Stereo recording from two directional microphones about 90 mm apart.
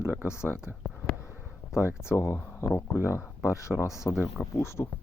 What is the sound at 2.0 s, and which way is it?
Speech, 10° right (ahead or behind).